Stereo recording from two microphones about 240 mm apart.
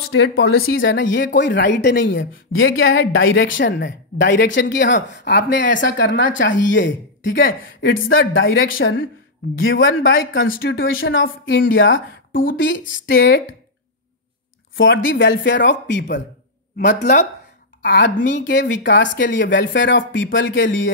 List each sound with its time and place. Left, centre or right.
0.1 s a woman's voice: left
12.3 s speech: left
12.5 s a woman's voice: left
14.8 s a woman's voice: left